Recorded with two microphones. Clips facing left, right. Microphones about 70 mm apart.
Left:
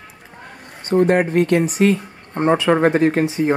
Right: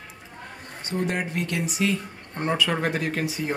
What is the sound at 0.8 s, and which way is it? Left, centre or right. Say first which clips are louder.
Speech: left 12 dB; left.